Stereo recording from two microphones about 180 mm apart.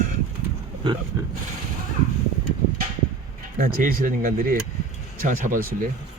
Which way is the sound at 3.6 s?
55° right (ahead or behind).